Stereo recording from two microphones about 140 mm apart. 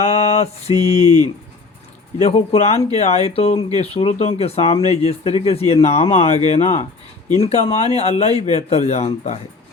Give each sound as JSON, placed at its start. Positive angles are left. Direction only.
{"t": 0.0, "sound": "a sound", "side_deg": 50}
{"t": 0.7, "sound": "speech", "side_deg": -30}
{"t": 2.2, "sound": "speech", "side_deg": 50}